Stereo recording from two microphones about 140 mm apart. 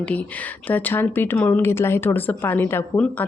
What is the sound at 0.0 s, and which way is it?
Speech, 10° left (ahead or behind).